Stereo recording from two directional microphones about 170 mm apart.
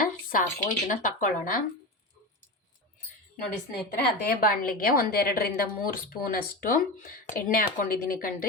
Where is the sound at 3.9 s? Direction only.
60° left (ahead or behind).